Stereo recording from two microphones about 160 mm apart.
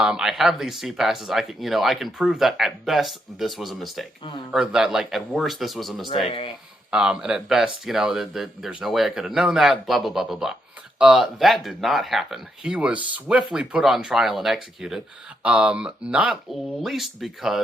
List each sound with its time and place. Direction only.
0.0 s speech: 5° right (ahead or behind)
6.2 s speech: 35° left (ahead or behind)
6.9 s speech: 5° right (ahead or behind)